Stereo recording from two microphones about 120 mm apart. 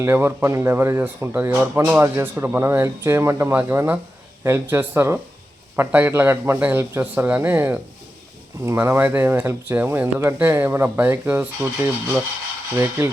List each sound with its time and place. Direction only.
0.0 s a man's voice: 20° right (ahead or behind)